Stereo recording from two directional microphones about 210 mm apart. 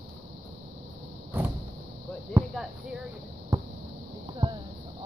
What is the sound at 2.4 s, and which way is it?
Speech, 15° right (ahead or behind).